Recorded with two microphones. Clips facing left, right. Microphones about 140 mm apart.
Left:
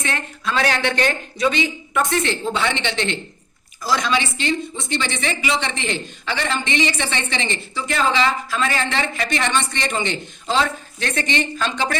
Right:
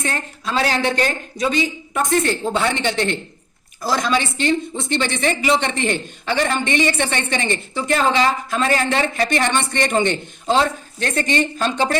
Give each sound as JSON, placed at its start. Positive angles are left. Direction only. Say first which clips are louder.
{"t": 0.0, "sound": "speech", "louder": "even", "side_deg": -35}
{"t": 2.0, "sound": "a woman's voice", "louder": "right 3 dB", "side_deg": -45}